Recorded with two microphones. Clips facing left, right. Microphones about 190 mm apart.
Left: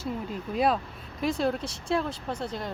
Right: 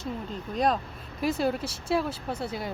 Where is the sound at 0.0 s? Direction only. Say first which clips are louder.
Left 2 dB; 5° left (ahead or behind).